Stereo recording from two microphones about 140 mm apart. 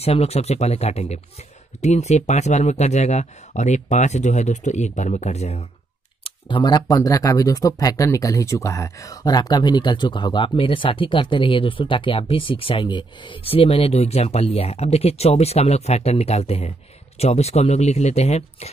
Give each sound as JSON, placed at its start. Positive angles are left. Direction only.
{"t": 0.0, "sound": "speech", "side_deg": 45}
{"t": 6.2, "sound": "speech", "side_deg": 35}